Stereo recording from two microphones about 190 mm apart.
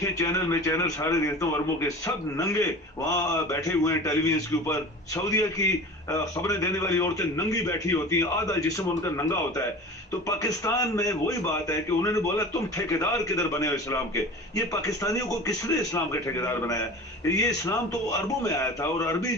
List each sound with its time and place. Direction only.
0.0 s a man's voice: 15° left (ahead or behind)